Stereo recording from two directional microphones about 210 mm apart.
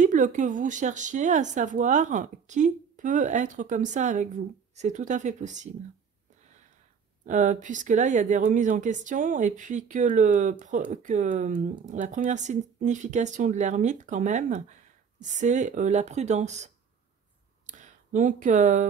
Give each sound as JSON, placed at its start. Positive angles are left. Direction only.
{"t": 0.0, "sound": "speech", "side_deg": -40}
{"t": 7.2, "sound": "speech", "side_deg": -35}
{"t": 17.6, "sound": "a sound", "side_deg": -35}